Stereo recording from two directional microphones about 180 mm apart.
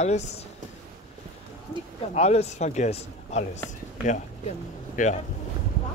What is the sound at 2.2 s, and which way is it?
Speech, 40° left (ahead or behind).